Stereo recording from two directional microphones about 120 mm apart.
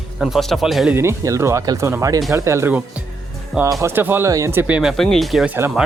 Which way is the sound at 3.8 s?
20° right (ahead or behind).